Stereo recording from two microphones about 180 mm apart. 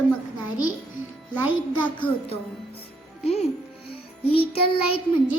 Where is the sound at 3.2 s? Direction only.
35° left (ahead or behind).